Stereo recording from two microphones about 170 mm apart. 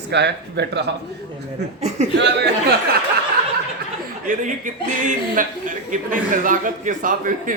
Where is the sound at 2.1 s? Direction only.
90° right.